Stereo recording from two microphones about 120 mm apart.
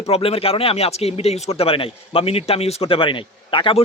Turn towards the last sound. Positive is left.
turn(degrees=45)  # may be behind; listen again after turning